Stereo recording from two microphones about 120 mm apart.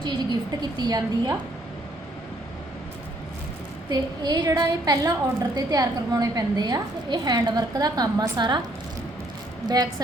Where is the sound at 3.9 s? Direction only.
35° right (ahead or behind).